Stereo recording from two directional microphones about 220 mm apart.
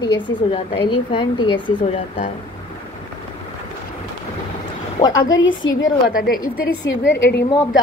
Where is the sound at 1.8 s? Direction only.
35° left (ahead or behind).